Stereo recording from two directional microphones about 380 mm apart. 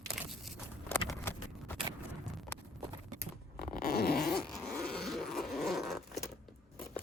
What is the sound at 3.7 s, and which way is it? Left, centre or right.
Zipper, left.